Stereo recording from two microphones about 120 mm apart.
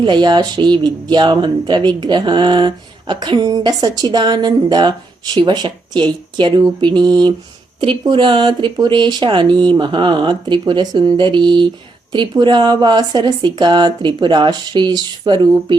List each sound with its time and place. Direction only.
0.0 s speech: 40° right (ahead or behind)